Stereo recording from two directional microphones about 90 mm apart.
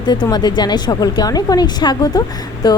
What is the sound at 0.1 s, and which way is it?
A woman's voice, 50° left (ahead or behind).